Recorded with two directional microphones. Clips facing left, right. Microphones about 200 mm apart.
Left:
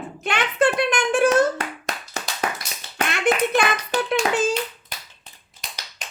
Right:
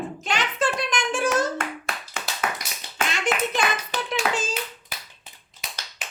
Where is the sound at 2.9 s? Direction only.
60° left (ahead or behind).